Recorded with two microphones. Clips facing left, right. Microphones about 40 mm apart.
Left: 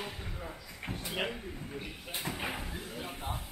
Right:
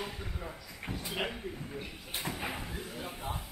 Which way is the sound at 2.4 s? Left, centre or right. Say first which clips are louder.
Even; centre.